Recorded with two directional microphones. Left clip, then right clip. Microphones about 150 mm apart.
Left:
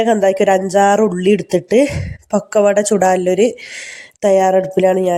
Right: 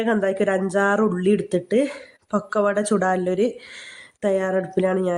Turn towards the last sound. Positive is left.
turn(degrees=15)  # may be behind; listen again after turning